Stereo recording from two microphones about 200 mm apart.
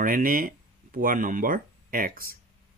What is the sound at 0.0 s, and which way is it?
Speech, 45° right (ahead or behind).